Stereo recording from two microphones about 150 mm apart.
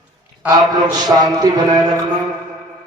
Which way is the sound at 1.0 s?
25° right (ahead or behind).